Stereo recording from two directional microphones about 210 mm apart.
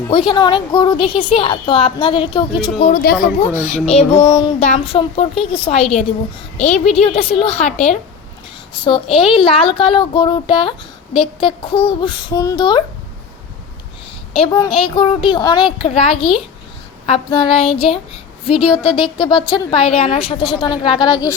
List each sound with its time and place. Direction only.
0.1 s speech: 25° left (ahead or behind)
2.7 s speech: 35° left (ahead or behind)
3.6 s speech: 35° left (ahead or behind)
8.7 s speech: 25° left (ahead or behind)
14.3 s speech: 25° left (ahead or behind)